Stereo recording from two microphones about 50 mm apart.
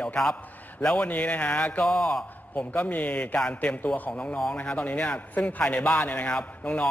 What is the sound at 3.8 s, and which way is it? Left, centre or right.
A man's voice, left.